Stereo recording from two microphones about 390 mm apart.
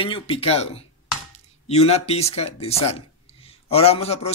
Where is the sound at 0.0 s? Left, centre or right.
Centre.